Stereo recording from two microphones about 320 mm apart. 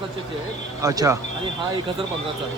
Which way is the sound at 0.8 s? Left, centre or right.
Centre.